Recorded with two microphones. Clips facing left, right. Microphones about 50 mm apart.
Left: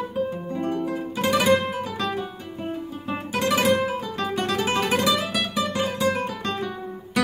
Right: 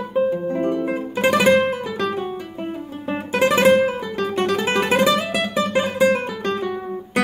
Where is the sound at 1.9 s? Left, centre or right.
Right.